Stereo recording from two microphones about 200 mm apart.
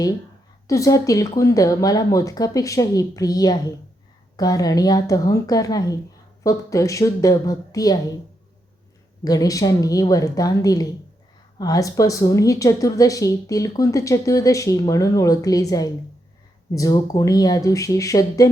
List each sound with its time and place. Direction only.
0.7 s a woman's voice: 15° left (ahead or behind)
9.2 s a woman's voice: 20° left (ahead or behind)